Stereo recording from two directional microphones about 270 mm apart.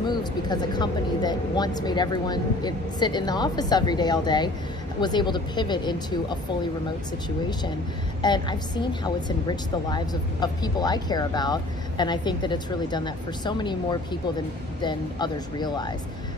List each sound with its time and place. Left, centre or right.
0.0 s a woman's voice: centre
7.2 s a woman's voice: centre